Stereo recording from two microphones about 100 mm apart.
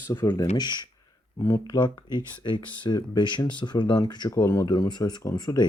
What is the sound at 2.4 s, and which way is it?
Speech, 55° left (ahead or behind).